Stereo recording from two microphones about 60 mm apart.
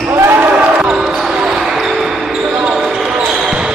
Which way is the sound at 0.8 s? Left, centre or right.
Centre.